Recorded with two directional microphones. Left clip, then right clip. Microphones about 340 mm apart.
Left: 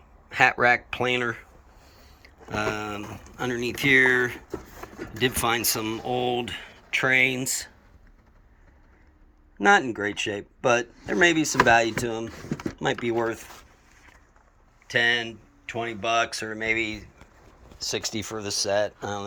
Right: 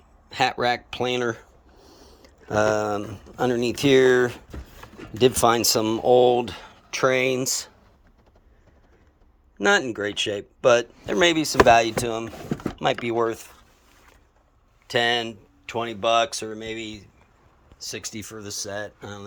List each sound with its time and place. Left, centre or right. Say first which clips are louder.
0.3 s speech: left 3 dB; centre
9.6 s speech: left 1 dB; centre
14.8 s speech: right 1 dB; centre
17.7 s speech: left 5 dB; centre